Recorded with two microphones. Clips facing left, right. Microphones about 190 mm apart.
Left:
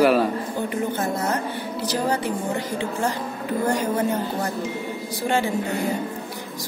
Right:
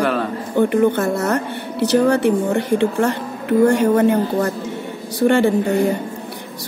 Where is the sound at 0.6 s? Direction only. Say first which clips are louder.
Right 12 dB; 65° right (ahead or behind).